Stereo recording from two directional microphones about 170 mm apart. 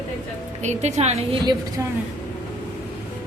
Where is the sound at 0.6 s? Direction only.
40° right (ahead or behind).